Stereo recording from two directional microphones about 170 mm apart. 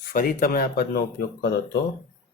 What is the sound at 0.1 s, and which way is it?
Speech, 55° left (ahead or behind).